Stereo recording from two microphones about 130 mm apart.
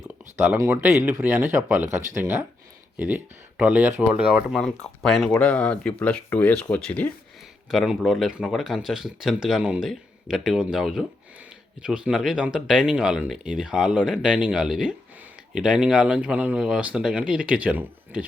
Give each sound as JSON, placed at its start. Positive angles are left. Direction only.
{"t": 0.3, "sound": "speech", "side_deg": -20}
{"t": 3.6, "sound": "speech", "side_deg": -15}
{"t": 7.7, "sound": "speech", "side_deg": 0}